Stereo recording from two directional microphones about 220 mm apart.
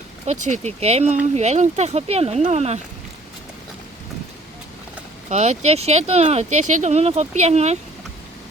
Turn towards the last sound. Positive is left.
turn(degrees=-30)  # may be behind; listen again after turning